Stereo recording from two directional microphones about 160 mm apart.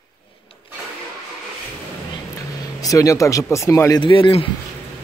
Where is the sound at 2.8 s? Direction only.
20° left (ahead or behind).